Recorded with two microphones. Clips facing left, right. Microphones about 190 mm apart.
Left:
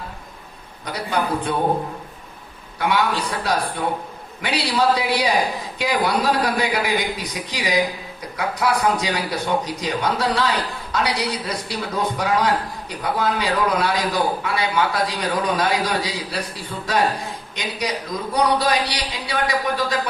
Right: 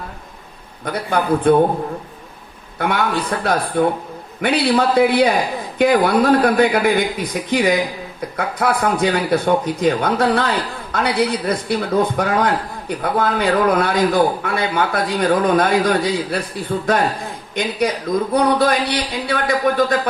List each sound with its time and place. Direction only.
0.9 s a man's voice: 55° right (ahead or behind)
2.7 s a man's voice: 55° right (ahead or behind)